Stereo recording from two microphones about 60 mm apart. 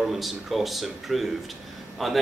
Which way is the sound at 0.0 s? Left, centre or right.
Centre.